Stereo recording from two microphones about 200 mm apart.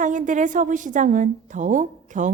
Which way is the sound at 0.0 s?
40° right (ahead or behind).